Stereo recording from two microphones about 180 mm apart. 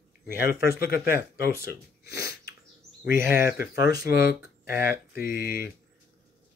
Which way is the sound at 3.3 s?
55° left (ahead or behind).